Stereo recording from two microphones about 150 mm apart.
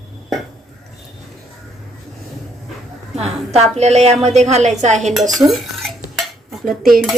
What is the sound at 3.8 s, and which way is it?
Speech, 45° right (ahead or behind).